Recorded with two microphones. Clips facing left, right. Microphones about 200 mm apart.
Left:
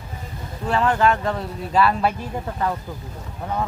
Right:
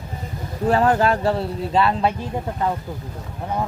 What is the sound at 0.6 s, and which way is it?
Speech, 40° right (ahead or behind).